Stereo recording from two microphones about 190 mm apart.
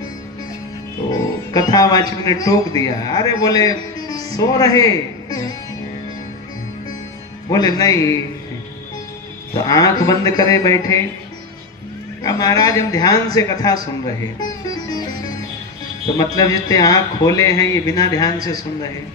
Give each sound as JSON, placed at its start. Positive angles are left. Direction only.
{"t": 1.5, "sound": "a man's voice", "side_deg": 20}
{"t": 7.4, "sound": "a man's voice", "side_deg": 20}
{"t": 9.7, "sound": "a man's voice", "side_deg": 20}
{"t": 12.2, "sound": "a man's voice", "side_deg": 20}
{"t": 16.3, "sound": "a man's voice", "side_deg": 20}